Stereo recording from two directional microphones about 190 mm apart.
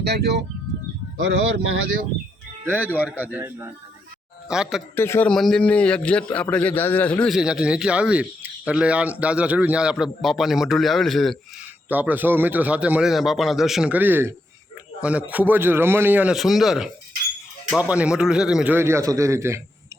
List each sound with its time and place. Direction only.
0.0 s speech: 60° right (ahead or behind)
1.2 s speech: 90° right
2.6 s a man's voice: 10° right (ahead or behind)
4.9 s a man's voice: 10° left (ahead or behind)
11.9 s a man's voice: 10° right (ahead or behind)